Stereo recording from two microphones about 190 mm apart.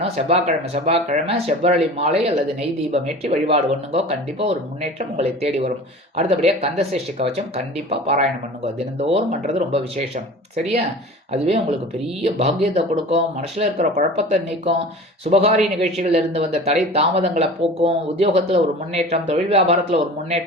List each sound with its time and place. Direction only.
0.0 s speech: 35° right (ahead or behind)